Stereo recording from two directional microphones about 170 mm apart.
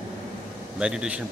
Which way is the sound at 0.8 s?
5° right (ahead or behind).